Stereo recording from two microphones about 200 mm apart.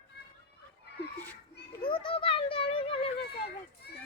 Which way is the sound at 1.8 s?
25° left (ahead or behind).